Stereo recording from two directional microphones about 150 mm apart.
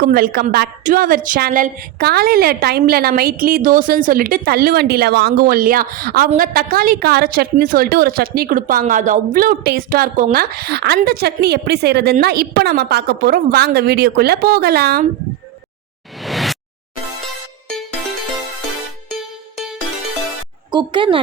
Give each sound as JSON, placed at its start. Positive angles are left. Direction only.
{"t": 0.0, "sound": "a woman's voice", "side_deg": -80}
{"t": 10.3, "sound": "a woman's voice", "side_deg": -90}
{"t": 16.2, "sound": "a sound", "side_deg": 0}
{"t": 19.1, "sound": "music", "side_deg": 0}
{"t": 20.7, "sound": "speech", "side_deg": -30}